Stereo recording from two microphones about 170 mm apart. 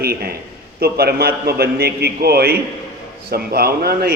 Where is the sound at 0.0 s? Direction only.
65° right (ahead or behind).